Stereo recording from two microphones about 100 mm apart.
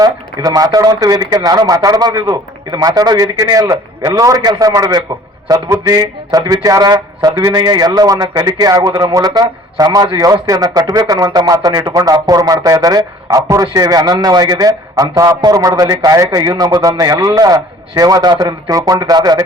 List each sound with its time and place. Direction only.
0.0 s a man's voice: 40° right (ahead or behind)
8.9 s a man's voice: 50° right (ahead or behind); by 16.4 s 35° right (ahead or behind)
16.4 s a man's voice: 50° right (ahead or behind)